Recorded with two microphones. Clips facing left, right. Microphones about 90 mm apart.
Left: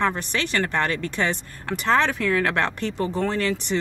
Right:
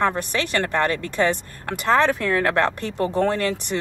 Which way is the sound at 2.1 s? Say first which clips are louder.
Right 2 dB; 35° right (ahead or behind).